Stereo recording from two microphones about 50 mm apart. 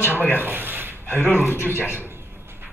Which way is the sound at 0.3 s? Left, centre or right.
Right.